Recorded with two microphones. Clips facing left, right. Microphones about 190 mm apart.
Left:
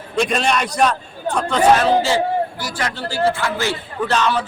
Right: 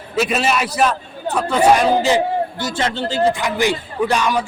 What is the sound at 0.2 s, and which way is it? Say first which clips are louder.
A man's voice: even; 5° right (ahead or behind).